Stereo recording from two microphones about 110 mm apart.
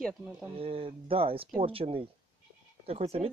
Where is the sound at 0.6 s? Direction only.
55° right (ahead or behind).